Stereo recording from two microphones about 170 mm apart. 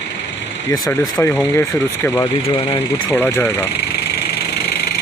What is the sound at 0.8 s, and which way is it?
Speech, 15° left (ahead or behind).